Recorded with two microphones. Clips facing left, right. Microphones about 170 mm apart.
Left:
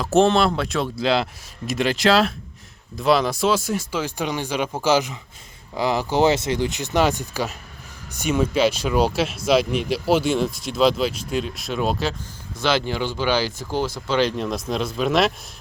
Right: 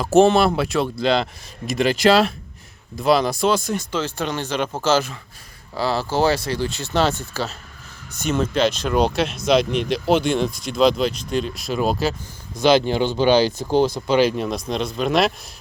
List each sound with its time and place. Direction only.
0.0 s speech: centre (ahead or behind)
12.5 s speech: 15° right (ahead or behind); by 15.3 s centre (ahead or behind)